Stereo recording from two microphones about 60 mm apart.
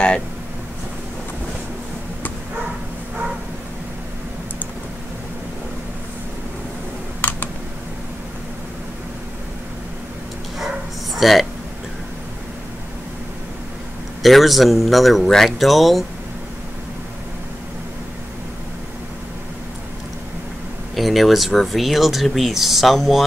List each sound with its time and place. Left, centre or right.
7.2 s computer keyboard: left
11.1 s speech: centre
14.2 s speech: centre
20.9 s speech: centre